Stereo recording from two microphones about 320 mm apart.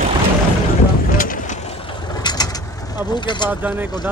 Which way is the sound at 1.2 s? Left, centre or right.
Left.